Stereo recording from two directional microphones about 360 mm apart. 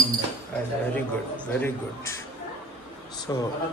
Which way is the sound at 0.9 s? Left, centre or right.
Centre.